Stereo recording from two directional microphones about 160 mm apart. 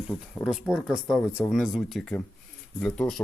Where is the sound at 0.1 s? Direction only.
5° left (ahead or behind).